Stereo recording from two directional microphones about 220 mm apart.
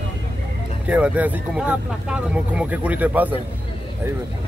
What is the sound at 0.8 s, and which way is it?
Speech, 5° right (ahead or behind).